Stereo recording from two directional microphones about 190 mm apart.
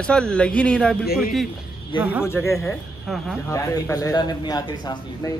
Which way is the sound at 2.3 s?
15° left (ahead or behind).